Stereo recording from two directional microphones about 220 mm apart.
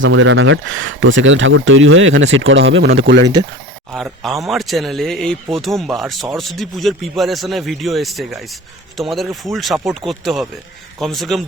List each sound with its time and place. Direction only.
0.0 s speech: 60° right (ahead or behind)
3.9 s speech: centre (ahead or behind)